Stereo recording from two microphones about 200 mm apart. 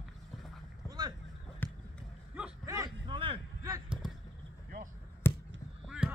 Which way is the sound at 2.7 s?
20° right (ahead or behind).